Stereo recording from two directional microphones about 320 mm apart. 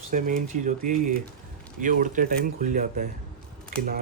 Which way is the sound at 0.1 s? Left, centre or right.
Right.